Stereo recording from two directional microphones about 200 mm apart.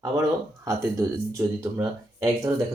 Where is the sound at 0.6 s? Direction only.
15° right (ahead or behind).